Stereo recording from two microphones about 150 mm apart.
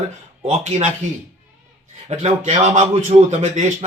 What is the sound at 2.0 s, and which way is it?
A man's voice, 50° right (ahead or behind).